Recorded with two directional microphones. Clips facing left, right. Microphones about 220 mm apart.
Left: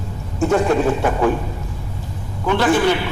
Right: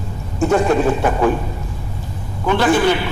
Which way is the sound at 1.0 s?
30° right (ahead or behind).